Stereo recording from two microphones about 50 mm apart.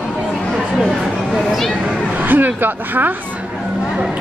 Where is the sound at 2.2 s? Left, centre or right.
Right.